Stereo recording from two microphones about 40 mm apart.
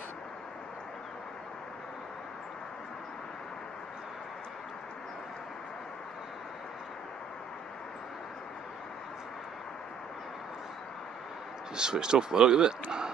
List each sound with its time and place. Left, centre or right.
11.7 s speech: centre